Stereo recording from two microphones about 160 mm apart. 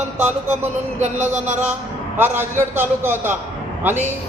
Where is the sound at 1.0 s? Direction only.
45° right (ahead or behind).